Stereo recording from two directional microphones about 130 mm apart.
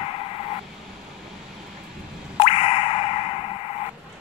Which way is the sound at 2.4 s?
45° left (ahead or behind).